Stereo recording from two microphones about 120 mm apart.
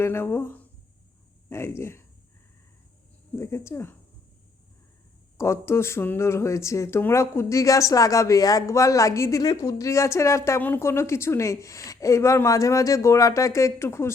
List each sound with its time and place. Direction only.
0.0 s a woman's voice: 20° left (ahead or behind)
3.3 s a woman's voice: 25° left (ahead or behind)
5.4 s a woman's voice: 20° left (ahead or behind)